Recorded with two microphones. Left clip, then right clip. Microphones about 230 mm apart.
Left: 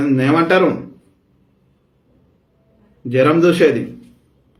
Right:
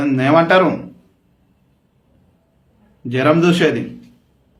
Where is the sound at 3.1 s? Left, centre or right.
Centre.